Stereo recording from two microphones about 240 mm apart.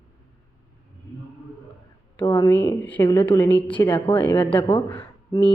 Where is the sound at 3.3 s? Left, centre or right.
Centre.